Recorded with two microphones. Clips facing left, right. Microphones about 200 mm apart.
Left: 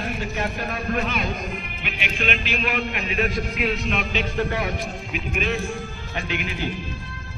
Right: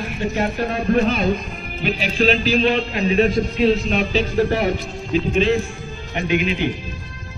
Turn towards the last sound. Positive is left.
turn(degrees=-20)  # may be behind; listen again after turning